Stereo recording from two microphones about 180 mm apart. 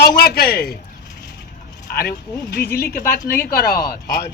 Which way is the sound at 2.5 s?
60° left (ahead or behind).